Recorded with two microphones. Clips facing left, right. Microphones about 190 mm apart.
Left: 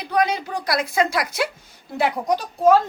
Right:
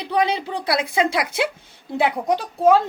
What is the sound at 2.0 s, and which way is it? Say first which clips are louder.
Speech: right 1 dB; 20° right (ahead or behind).